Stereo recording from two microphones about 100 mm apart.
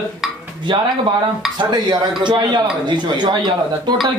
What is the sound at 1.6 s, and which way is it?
A man's voice, 45° right (ahead or behind).